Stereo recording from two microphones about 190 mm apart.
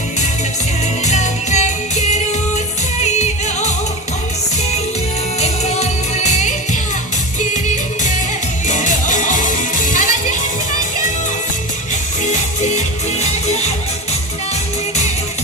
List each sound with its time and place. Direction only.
1.0 s music: 40° left (ahead or behind)
5.4 s music: 35° left (ahead or behind)
8.6 s music: 40° left (ahead or behind)
12.6 s music: 40° left (ahead or behind)